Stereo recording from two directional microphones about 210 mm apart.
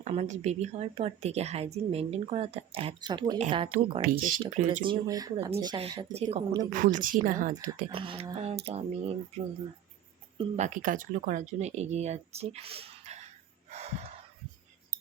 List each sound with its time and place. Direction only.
0.0 s a woman's voice: 30° right (ahead or behind)
4.0 s speech: 40° right (ahead or behind)
4.8 s a woman's voice: 20° right (ahead or behind)
6.6 s speech: 40° right (ahead or behind)
7.9 s a woman's voice: 25° right (ahead or behind)
10.3 s speech: 35° right (ahead or behind)
13.7 s snort: 30° right (ahead or behind)